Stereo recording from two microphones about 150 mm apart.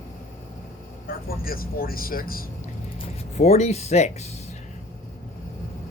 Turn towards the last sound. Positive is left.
turn(degrees=45)  # may be behind; listen again after turning